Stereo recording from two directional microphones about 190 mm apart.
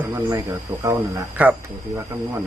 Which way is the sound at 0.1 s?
15° right (ahead or behind).